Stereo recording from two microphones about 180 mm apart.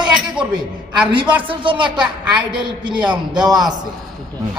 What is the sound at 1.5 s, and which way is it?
A man's voice, 30° right (ahead or behind).